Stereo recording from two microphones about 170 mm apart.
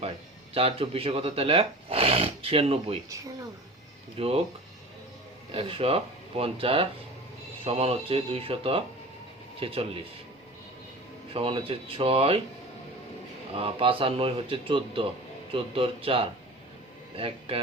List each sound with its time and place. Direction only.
0.5 s speech: 35° right (ahead or behind)
4.2 s speech: 35° right (ahead or behind)
5.5 s speech: 35° right (ahead or behind)
11.3 s speech: 30° right (ahead or behind)
13.6 s speech: 35° right (ahead or behind)